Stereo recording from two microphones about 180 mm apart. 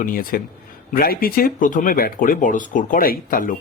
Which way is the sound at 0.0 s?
50° left (ahead or behind).